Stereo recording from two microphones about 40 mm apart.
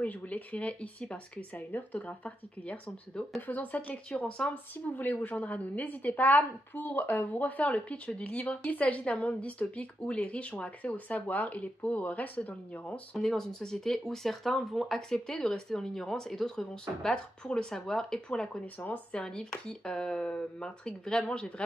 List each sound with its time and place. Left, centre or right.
0.0 s a woman's voice: left
13.2 s speech: centre
15.0 s speech: centre